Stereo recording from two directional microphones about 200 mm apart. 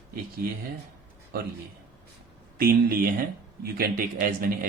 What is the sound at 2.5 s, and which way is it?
Speech, 45° right (ahead or behind).